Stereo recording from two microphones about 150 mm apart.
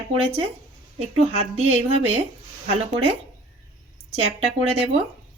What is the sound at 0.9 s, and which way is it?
Speech, 45° right (ahead or behind).